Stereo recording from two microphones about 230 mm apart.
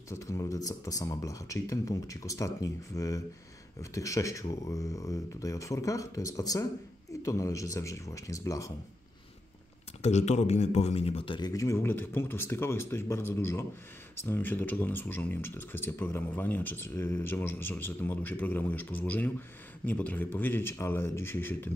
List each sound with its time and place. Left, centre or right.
0.1 s speech: centre
10.0 s speech: left; by 21.6 s centre